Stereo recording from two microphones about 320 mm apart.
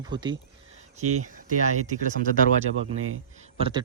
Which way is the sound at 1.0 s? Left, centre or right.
Right.